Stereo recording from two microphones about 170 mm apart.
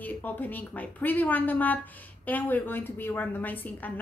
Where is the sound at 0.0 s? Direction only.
10° left (ahead or behind).